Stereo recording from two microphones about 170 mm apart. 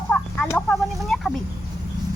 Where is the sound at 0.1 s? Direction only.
10° left (ahead or behind).